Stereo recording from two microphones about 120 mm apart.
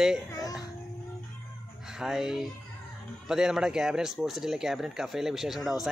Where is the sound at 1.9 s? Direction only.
5° right (ahead or behind).